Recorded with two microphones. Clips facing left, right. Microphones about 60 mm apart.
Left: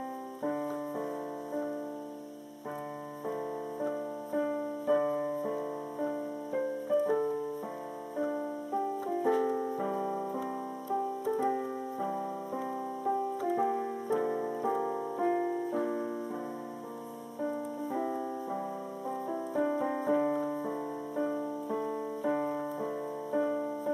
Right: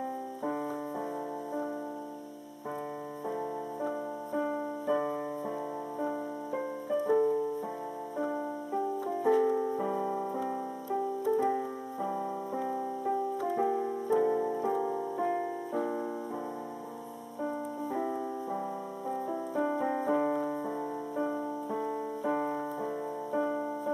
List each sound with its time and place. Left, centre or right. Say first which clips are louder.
0.4 s keyboard: left 1 dB; centre
3.3 s keyboard: even; centre
5.0 s piano: left 2 dB; centre
8.7 s keyboard: even; centre
14.8 s music: right 1 dB; left
15.2 s keyboard: left 2 dB; centre
17.9 s music: even; centre
20.2 s keyboard: even; centre
21.6 s keyboard: even; centre
23.3 s music: left 1 dB; centre